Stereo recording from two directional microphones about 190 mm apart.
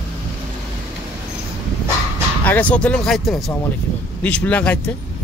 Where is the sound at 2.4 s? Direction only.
10° left (ahead or behind).